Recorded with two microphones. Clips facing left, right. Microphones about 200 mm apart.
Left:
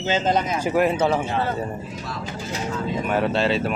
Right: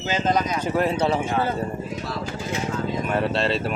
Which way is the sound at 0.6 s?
5° left (ahead or behind).